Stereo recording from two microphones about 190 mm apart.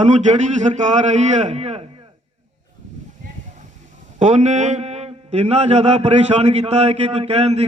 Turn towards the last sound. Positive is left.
turn(degrees=-35)  # may be behind; listen again after turning